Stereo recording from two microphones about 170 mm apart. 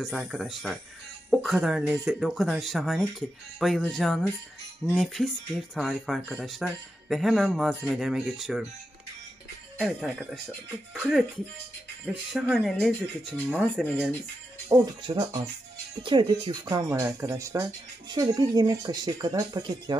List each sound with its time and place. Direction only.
0.0 s speech: centre (ahead or behind)
9.8 s speech: 5° right (ahead or behind)
14.7 s speech: 30° right (ahead or behind)